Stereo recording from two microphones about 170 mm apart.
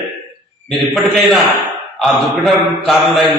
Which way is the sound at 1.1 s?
Centre (ahead or behind).